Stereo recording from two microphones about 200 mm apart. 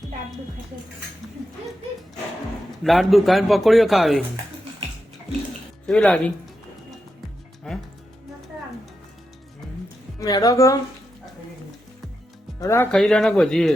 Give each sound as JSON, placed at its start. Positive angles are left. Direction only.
{"t": 2.8, "sound": "speech", "side_deg": 0}
{"t": 5.8, "sound": "speech", "side_deg": 5}
{"t": 7.6, "sound": "music", "side_deg": 5}
{"t": 10.2, "sound": "a woman's voice", "side_deg": 20}
{"t": 12.5, "sound": "speech", "side_deg": 15}
{"t": 12.9, "sound": "speech", "side_deg": 5}